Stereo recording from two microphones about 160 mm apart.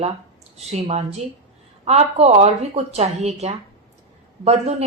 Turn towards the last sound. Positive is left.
turn(degrees=-40)  # may be behind; listen again after turning